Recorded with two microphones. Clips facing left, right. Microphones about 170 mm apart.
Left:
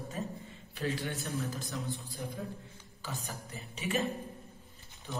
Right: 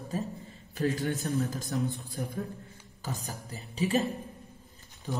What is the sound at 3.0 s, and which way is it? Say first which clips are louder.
A man's voice: right 3 dB; 40° right (ahead or behind).